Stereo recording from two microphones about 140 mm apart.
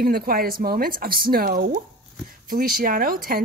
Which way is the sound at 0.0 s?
90° right.